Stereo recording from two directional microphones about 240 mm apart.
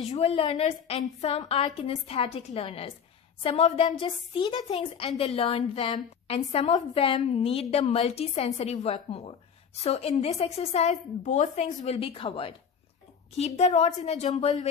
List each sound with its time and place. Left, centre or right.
0.1 s a woman's voice: left